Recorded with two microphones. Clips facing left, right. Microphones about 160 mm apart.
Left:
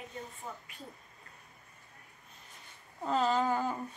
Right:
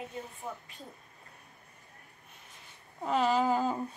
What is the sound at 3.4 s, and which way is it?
Speech, 15° right (ahead or behind).